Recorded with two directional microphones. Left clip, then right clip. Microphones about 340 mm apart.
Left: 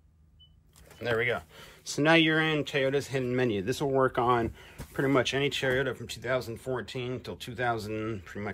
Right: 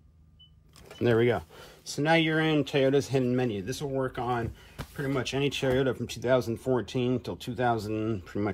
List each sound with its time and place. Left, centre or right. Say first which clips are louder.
1.0 s speech: right 4 dB; centre
1.9 s speech: left 2 dB; centre